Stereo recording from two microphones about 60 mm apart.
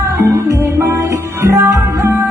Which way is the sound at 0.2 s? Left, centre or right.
Right.